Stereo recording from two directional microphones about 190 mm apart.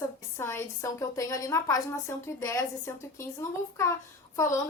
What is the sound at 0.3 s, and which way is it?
A woman's voice, 10° left (ahead or behind).